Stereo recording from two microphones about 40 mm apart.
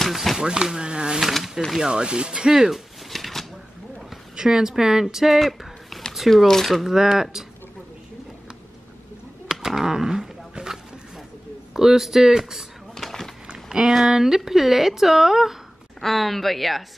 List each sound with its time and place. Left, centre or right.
0.1 s a woman's voice: centre
0.4 s speech: centre
1.2 s a woman's voice: centre
1.8 s speech: right
3.1 s shuffling cards: centre
4.4 s speech: centre
6.3 s speech: centre
6.8 s speech: centre
9.5 s a sound: centre
11.7 s speech: centre
12.9 s a sound: centre
13.5 s speech: centre
16.0 s a woman's voice: centre